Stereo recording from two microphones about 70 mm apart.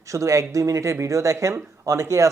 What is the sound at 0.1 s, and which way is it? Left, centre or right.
Speech, right.